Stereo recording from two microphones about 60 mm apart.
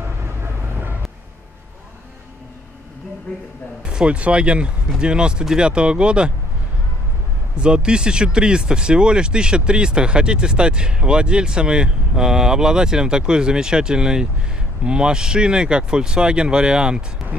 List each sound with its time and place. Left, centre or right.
0.4 s vehicle: right
3.8 s speech: centre
7.5 s speech: centre